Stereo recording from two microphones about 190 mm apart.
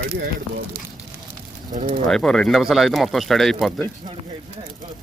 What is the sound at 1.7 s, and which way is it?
Speech, 35° right (ahead or behind).